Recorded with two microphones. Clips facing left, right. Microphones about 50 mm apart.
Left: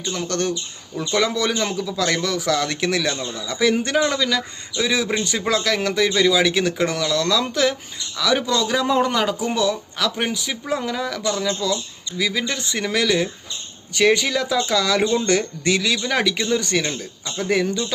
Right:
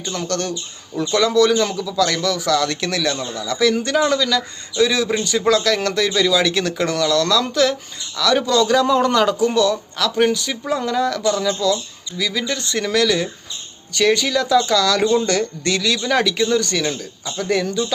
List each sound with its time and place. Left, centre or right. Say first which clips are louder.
0.3 s a man's voice: even; left